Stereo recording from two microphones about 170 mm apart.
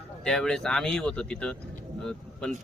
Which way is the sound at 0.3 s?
5° left (ahead or behind).